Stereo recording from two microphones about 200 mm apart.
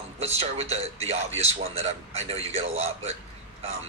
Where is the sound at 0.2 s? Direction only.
30° right (ahead or behind).